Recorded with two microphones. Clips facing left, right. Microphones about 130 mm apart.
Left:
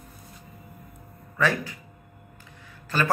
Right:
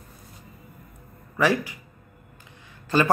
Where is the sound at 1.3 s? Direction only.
15° right (ahead or behind).